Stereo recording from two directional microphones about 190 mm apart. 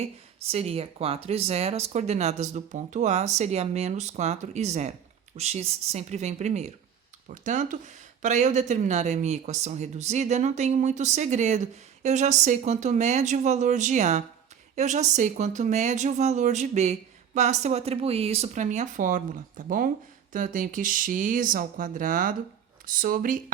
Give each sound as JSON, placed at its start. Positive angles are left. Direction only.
{"t": 0.0, "sound": "speech", "side_deg": -35}